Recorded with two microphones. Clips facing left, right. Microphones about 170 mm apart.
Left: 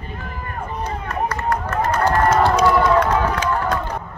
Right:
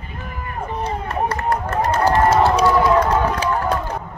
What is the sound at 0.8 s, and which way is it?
Run, 30° right (ahead or behind).